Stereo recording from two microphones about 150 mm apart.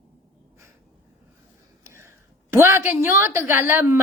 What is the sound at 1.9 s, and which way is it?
A woman's voice, 15° right (ahead or behind).